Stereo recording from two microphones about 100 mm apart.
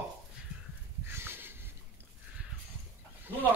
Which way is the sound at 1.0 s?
20° right (ahead or behind).